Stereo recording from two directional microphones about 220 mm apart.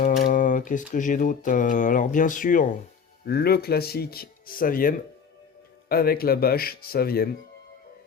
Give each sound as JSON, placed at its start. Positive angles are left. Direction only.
{"t": 0.0, "sound": "speech", "side_deg": 40}